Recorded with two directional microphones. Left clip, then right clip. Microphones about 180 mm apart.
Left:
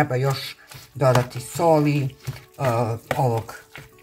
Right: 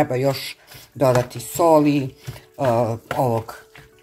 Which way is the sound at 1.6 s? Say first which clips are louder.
Right 3 dB; 35° right (ahead or behind).